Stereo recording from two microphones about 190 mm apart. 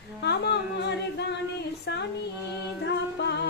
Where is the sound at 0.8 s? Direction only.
65° left (ahead or behind).